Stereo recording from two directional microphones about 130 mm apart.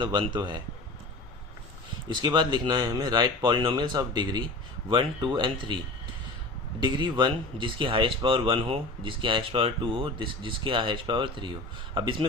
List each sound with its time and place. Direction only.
0.0 s speech: 35° right (ahead or behind)
2.0 s speech: 35° right (ahead or behind)